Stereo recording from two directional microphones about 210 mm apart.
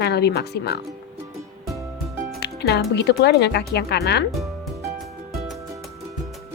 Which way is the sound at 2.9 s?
55° left (ahead or behind).